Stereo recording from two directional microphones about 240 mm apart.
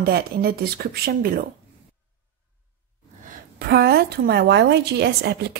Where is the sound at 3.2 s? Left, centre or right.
Right.